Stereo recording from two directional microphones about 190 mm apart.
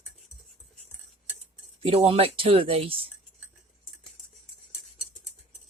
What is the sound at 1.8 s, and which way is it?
Speech, 30° right (ahead or behind).